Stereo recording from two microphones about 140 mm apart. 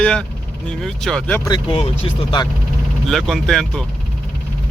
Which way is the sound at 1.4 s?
30° left (ahead or behind).